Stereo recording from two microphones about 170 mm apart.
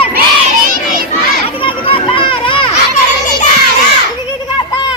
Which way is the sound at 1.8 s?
30° left (ahead or behind).